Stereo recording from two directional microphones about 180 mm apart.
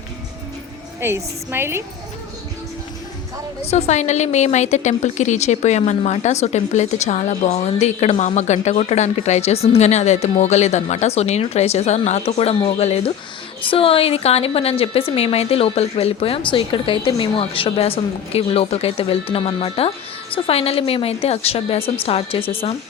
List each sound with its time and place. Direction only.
1.0 s a woman's voice: 15° right (ahead or behind)
3.6 s speech: 35° left (ahead or behind)